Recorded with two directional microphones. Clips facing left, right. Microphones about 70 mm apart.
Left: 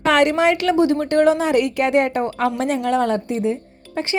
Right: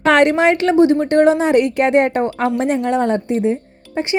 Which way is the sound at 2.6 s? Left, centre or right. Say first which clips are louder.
Right 2 dB; centre.